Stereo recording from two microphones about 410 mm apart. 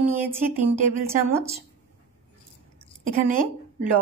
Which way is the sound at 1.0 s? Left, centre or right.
Centre.